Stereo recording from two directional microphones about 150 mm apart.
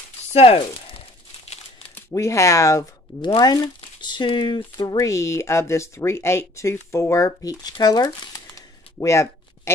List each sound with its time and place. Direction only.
0.3 s speech: 40° left (ahead or behind)
2.0 s speech: 15° left (ahead or behind)